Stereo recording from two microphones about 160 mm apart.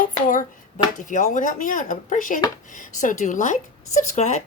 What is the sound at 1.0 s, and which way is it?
Speech, 55° left (ahead or behind).